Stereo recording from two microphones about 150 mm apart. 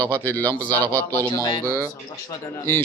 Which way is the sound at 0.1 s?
15° left (ahead or behind).